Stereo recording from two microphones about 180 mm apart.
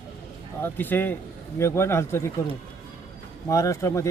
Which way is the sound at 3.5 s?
15° left (ahead or behind).